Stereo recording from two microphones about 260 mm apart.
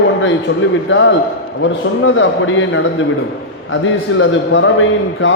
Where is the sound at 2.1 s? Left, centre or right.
Left.